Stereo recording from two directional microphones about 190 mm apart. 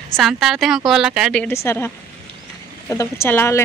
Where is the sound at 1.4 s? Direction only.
15° left (ahead or behind).